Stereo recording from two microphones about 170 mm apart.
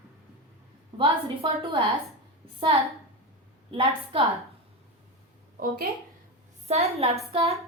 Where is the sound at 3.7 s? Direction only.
35° right (ahead or behind).